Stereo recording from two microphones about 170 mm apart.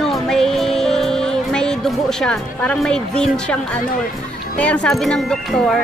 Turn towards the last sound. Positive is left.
turn(degrees=0)  # may be behind; listen again after turning